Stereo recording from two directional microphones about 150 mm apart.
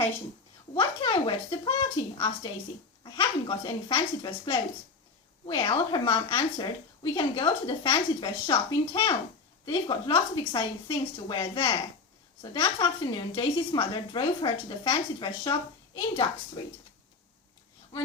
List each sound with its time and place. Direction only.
0.7 s a woman's voice: 40° left (ahead or behind)
12.8 s a woman's voice: 35° left (ahead or behind)